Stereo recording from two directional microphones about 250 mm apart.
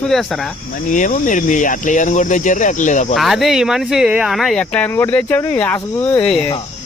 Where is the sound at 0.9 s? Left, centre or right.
Left.